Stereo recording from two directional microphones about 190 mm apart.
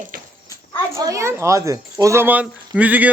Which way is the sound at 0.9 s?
15° right (ahead or behind).